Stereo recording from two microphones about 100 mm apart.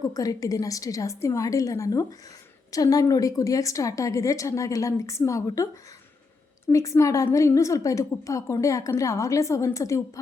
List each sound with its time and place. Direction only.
0.1 s a woman's voice: 35° left (ahead or behind)
6.7 s a woman's voice: 35° left (ahead or behind)